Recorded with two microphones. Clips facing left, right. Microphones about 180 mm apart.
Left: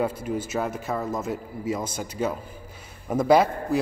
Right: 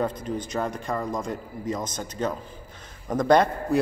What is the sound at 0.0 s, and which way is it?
A man's voice, 5° left (ahead or behind).